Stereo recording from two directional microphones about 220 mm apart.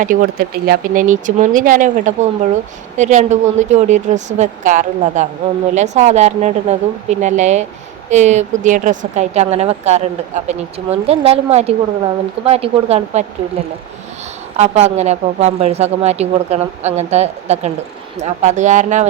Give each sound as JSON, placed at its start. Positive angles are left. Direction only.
{"t": 0.0, "sound": "a woman's voice", "side_deg": -40}
{"t": 14.5, "sound": "a woman's voice", "side_deg": -30}